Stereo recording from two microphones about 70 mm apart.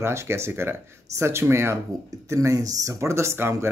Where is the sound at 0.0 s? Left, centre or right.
Right.